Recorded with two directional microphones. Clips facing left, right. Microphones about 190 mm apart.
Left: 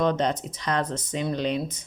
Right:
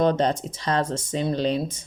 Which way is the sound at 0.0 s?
35° right (ahead or behind).